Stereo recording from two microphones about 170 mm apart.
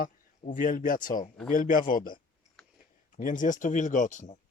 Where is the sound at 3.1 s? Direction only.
50° left (ahead or behind).